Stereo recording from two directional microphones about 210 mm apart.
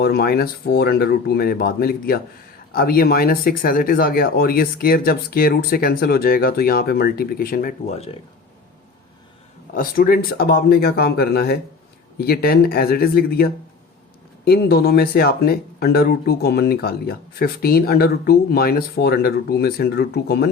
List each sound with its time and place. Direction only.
0.0 s speech: 50° left (ahead or behind); by 8.1 s 30° left (ahead or behind)
9.7 s speech: 45° left (ahead or behind)